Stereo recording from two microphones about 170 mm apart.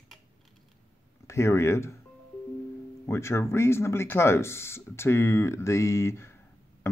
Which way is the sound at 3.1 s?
15° left (ahead or behind).